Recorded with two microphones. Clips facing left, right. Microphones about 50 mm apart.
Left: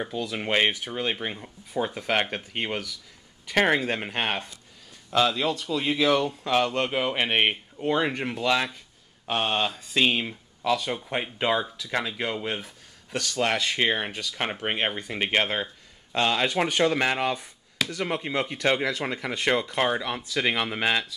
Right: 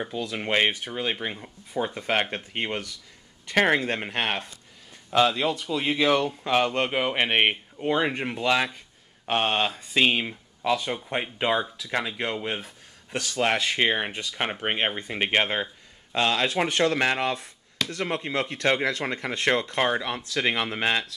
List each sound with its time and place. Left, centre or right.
0.0 s speech: centre
9.3 s speech: right
11.0 s speech: centre